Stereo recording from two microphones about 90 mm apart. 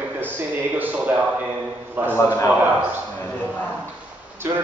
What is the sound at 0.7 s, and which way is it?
Speech, 20° right (ahead or behind).